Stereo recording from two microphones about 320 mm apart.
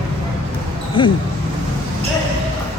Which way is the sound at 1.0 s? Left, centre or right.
Centre.